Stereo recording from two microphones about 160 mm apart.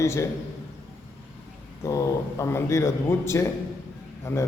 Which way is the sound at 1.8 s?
20° left (ahead or behind).